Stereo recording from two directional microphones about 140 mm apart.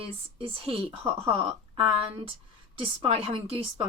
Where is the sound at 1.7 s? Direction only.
40° right (ahead or behind).